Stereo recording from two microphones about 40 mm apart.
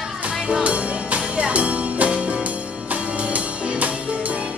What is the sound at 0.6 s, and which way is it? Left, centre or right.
Music, right.